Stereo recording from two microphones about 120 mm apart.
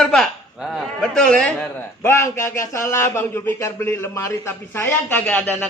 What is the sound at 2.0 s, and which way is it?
A man's voice, 20° left (ahead or behind).